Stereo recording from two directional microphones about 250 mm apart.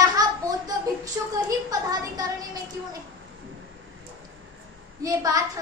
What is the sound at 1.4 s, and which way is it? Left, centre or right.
Speech, centre.